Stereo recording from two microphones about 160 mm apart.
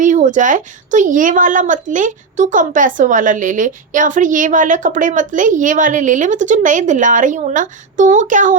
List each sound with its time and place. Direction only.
0.0 s a woman's voice: 50° right (ahead or behind)